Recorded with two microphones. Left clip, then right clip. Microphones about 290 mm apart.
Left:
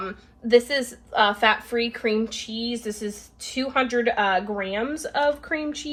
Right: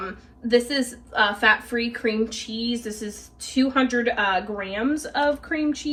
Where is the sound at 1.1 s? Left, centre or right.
Centre.